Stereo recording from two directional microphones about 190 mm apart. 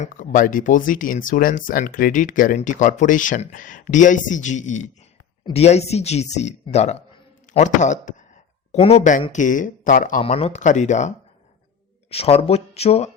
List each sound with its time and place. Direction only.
0.0 s speech: 45° left (ahead or behind)
12.1 s speech: 30° left (ahead or behind)